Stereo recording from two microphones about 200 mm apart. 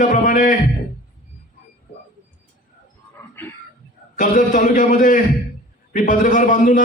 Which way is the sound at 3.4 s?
10° left (ahead or behind).